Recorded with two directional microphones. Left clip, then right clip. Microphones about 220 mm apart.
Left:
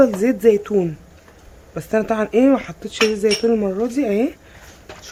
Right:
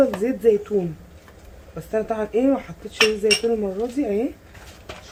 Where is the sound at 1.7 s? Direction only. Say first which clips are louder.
Left 5 dB; 45° left (ahead or behind).